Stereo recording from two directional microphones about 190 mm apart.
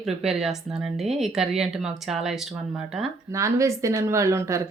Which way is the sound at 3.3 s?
15° right (ahead or behind).